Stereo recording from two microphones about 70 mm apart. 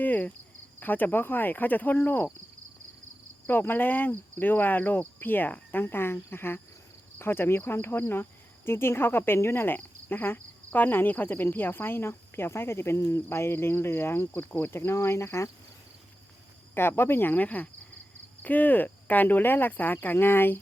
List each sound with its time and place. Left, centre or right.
0.0 s cricket: left
0.8 s speech: left
3.4 s speech: left
16.7 s speech: left